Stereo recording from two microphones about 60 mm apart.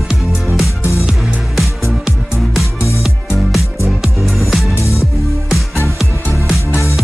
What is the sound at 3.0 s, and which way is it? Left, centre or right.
Music, centre.